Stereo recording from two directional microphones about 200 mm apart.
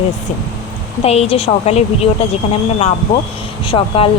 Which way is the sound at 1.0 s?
30° left (ahead or behind).